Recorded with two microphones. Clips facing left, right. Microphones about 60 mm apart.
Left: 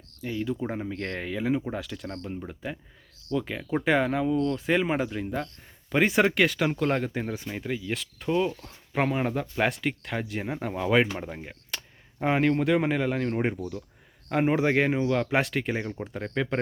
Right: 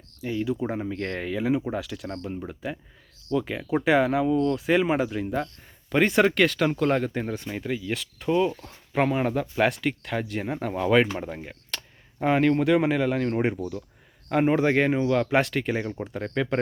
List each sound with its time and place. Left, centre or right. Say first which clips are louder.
0.2 s speech: right 3 dB; centre
5.9 s speech: right 2 dB; centre
11.7 s a sound: right 1 dB; centre
12.2 s speech: right 2 dB; centre